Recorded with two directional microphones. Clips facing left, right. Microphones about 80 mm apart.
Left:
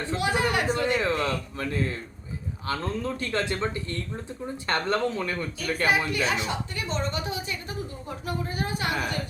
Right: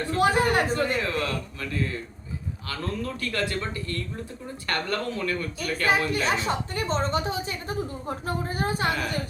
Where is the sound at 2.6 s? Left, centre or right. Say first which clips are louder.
Left 3 dB; left.